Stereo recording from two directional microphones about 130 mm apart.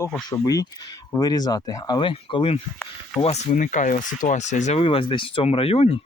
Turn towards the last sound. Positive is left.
turn(degrees=50)  # may be behind; listen again after turning